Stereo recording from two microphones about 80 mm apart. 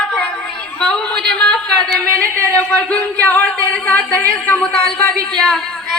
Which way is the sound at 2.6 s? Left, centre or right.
Centre.